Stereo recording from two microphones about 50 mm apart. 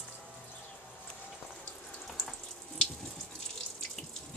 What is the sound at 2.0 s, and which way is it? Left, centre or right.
Water tap, centre.